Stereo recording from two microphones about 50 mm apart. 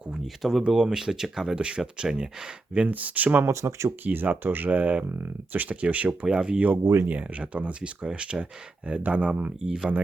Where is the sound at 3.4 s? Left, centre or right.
Right.